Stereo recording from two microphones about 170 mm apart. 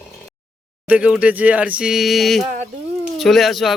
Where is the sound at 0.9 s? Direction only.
5° right (ahead or behind).